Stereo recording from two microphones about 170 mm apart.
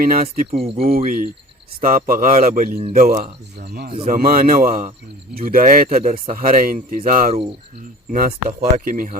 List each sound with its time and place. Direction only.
0.0 s speech: 55° right (ahead or behind)
0.5 s speech: 35° right (ahead or behind)
0.8 s a man's voice: 60° right (ahead or behind)